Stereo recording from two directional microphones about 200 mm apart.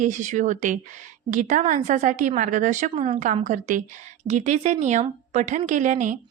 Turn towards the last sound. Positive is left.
turn(degrees=-40)  # may be behind; listen again after turning